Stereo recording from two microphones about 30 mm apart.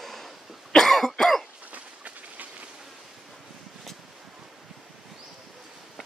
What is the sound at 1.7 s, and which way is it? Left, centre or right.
Run, right.